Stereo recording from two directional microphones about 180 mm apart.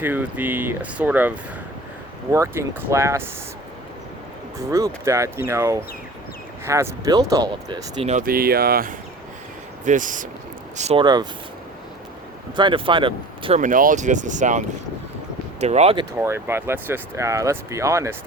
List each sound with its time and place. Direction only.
0.0 s speech: 10° right (ahead or behind)
2.3 s speech: 15° right (ahead or behind)
4.7 s speech: 15° right (ahead or behind)
8.0 s speech: 45° right (ahead or behind)
11.0 s speech: 25° right (ahead or behind)
12.5 s speech: 25° right (ahead or behind)
13.6 s speech: 45° right (ahead or behind)
15.6 s speech: 35° right (ahead or behind)
16.1 s speech: 15° right (ahead or behind)